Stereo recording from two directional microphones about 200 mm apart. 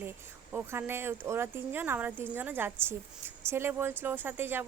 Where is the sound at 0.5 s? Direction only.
10° right (ahead or behind).